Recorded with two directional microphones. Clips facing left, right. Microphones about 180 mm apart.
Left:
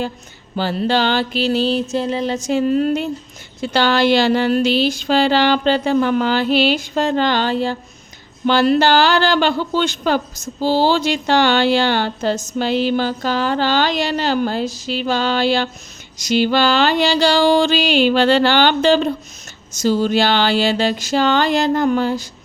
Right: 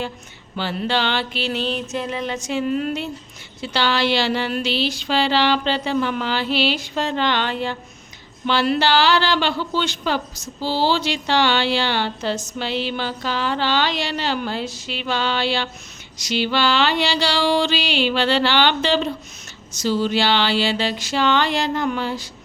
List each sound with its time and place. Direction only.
0.5 s music: 40° left (ahead or behind)
3.6 s speech: 45° left (ahead or behind)